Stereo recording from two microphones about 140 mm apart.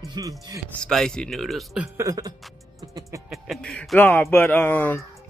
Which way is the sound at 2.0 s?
25° right (ahead or behind).